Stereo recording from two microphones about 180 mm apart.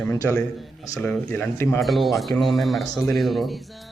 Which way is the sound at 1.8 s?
Centre (ahead or behind).